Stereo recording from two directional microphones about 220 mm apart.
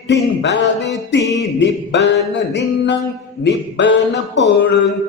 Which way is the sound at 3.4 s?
55° left (ahead or behind).